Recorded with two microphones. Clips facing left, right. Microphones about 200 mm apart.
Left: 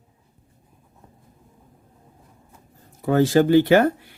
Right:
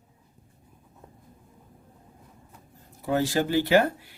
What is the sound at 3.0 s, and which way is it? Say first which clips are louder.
Speech: left 8 dB; 55° left (ahead or behind).